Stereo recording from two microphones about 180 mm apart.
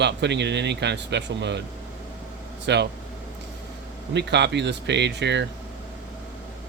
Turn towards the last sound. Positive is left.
turn(degrees=-75)  # may be behind; listen again after turning